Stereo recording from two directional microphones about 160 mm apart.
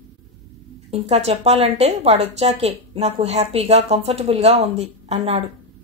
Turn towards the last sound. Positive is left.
turn(degrees=-40)  # may be behind; listen again after turning